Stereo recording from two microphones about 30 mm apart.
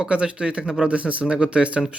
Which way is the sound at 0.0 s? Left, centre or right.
Right.